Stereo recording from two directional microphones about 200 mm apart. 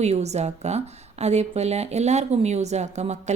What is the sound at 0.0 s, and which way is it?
Speech, 35° right (ahead or behind).